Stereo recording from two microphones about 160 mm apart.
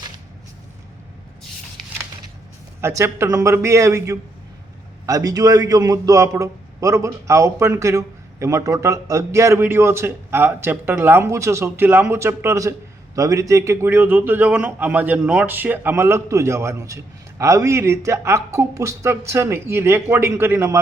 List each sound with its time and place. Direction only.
2.8 s a man's voice: 15° right (ahead or behind)